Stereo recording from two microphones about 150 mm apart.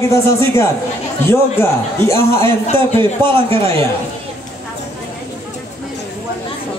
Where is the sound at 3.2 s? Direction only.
35° right (ahead or behind).